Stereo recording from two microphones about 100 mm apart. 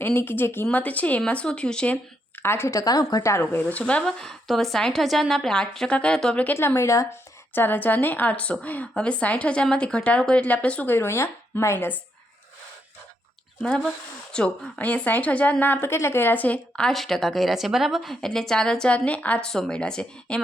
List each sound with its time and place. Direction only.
0.0 s a woman's voice: 20° left (ahead or behind)
2.4 s a woman's voice: 25° left (ahead or behind)
3.3 s speech: 15° left (ahead or behind)
6.4 s a woman's voice: 20° left (ahead or behind)
7.5 s a woman's voice: 20° left (ahead or behind)
13.6 s a woman's voice: 10° left (ahead or behind)